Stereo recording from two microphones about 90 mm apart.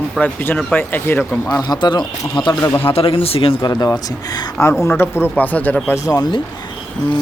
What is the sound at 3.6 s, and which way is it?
Speech, 45° left (ahead or behind).